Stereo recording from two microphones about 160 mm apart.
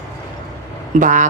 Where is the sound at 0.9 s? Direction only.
50° right (ahead or behind).